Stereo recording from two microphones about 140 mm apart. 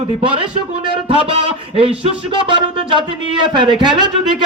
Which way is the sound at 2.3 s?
35° right (ahead or behind).